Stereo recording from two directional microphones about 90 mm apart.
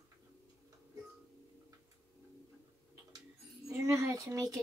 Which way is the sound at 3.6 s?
35° right (ahead or behind).